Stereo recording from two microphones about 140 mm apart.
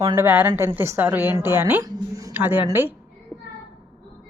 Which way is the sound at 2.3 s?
15° right (ahead or behind).